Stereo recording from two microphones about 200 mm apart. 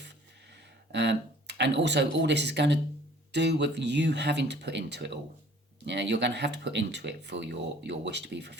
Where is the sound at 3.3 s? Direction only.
60° right (ahead or behind).